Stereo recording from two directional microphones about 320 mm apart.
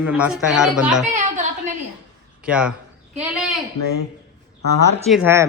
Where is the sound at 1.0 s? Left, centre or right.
Right.